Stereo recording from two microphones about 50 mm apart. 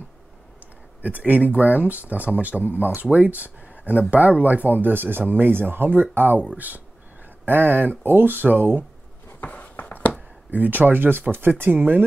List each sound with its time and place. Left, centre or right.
1.0 s speech: right
9.4 s walk: left
10.5 s speech: right